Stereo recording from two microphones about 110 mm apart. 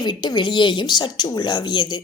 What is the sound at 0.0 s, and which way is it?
Speech, 40° left (ahead or behind).